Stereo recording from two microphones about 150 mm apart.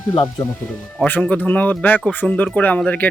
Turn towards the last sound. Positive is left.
turn(degrees=10)  # may be behind; listen again after turning